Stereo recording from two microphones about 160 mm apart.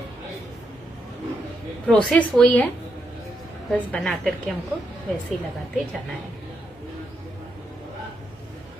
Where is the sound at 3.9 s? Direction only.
Centre (ahead or behind).